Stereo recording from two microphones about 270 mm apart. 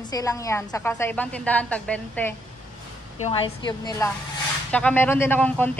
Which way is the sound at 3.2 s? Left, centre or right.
Centre.